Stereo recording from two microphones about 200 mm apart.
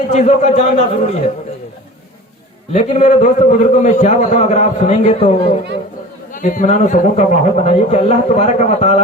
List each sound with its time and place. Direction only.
0.1 s a man's voice: 35° left (ahead or behind)
2.7 s a man's voice: 35° left (ahead or behind)
6.3 s a man's voice: 40° left (ahead or behind)